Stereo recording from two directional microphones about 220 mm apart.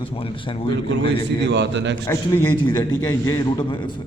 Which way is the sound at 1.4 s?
55° right (ahead or behind).